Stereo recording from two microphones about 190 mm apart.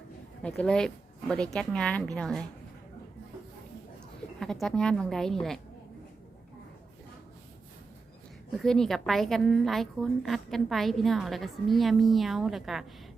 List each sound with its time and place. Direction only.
0.4 s a woman's voice: 5° left (ahead or behind)
4.4 s a woman's voice: centre (ahead or behind)
8.5 s a woman's voice: centre (ahead or behind)